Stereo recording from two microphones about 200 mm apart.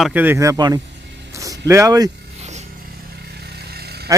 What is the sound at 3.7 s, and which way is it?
Vehicle, 55° right (ahead or behind).